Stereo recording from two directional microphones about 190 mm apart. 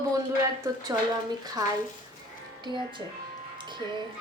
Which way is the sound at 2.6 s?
25° right (ahead or behind).